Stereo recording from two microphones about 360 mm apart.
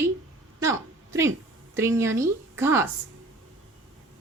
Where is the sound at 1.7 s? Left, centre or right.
Centre.